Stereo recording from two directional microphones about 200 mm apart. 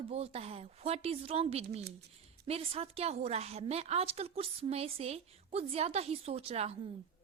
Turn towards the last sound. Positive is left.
turn(degrees=-30)  # may be behind; listen again after turning